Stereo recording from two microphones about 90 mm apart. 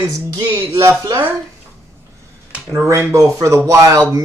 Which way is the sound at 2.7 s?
35° right (ahead or behind).